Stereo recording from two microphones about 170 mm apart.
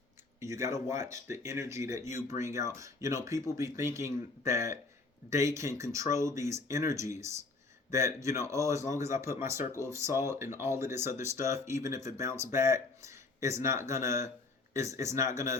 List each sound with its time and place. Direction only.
0.3 s speech: 15° right (ahead or behind)